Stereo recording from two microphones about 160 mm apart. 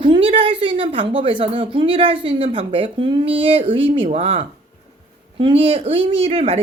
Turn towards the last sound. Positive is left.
turn(degrees=-40)  # may be behind; listen again after turning